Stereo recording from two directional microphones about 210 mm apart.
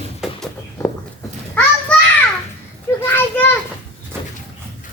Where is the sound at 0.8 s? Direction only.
15° left (ahead or behind).